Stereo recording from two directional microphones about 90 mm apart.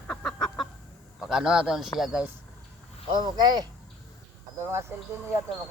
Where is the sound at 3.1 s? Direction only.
55° right (ahead or behind).